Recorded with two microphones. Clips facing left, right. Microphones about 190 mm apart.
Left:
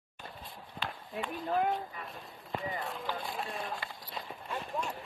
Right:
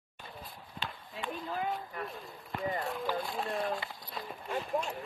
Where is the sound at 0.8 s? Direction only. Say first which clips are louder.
Left 2 dB; 55° left (ahead or behind).